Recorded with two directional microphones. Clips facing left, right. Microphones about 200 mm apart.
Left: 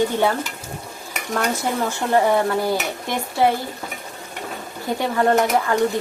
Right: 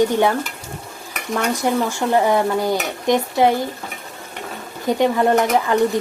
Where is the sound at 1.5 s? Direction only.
15° right (ahead or behind).